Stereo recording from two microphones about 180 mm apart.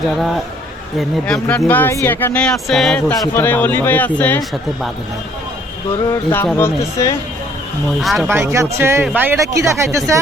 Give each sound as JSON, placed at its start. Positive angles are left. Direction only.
{"t": 0.9, "sound": "speech", "side_deg": 5}
{"t": 6.1, "sound": "speech", "side_deg": 10}
{"t": 8.0, "sound": "speech", "side_deg": 0}
{"t": 8.3, "sound": "speech", "side_deg": -15}